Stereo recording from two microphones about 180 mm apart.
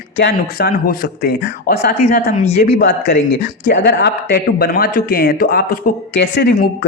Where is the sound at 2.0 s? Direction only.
40° left (ahead or behind).